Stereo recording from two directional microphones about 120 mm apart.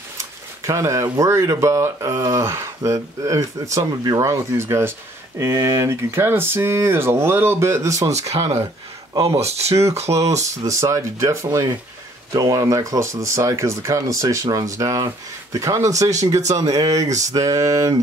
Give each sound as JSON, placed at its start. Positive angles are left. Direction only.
{"t": 0.2, "sound": "speech", "side_deg": -25}
{"t": 9.2, "sound": "speech", "side_deg": -55}
{"t": 10.6, "sound": "speech", "side_deg": -25}